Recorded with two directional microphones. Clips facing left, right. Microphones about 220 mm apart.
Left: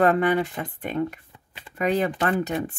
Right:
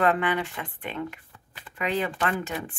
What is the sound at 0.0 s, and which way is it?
Speech, 40° left (ahead or behind).